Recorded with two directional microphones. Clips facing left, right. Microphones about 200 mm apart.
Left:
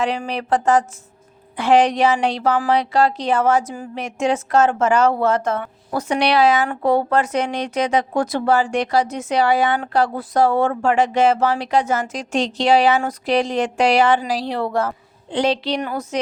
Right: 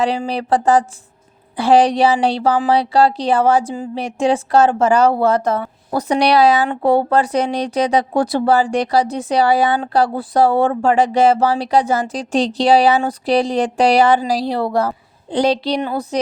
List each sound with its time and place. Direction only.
0.3 s speech: 35° right (ahead or behind)